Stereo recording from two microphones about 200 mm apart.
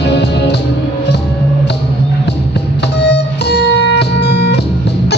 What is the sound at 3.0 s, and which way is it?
Music, 55° left (ahead or behind).